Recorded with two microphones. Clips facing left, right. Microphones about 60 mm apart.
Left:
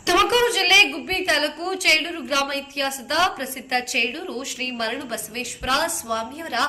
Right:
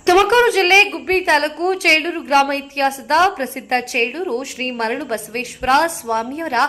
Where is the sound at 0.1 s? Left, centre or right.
Right.